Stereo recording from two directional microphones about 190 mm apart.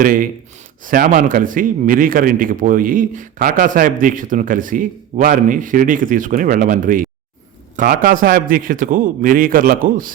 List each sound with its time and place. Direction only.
0.0 s speech: 45° right (ahead or behind)